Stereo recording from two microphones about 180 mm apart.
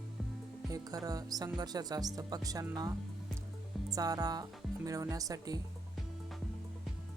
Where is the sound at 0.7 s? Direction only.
20° right (ahead or behind).